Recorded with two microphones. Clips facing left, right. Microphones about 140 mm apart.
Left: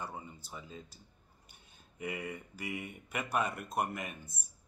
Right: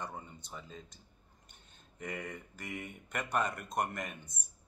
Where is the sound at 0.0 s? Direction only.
5° left (ahead or behind).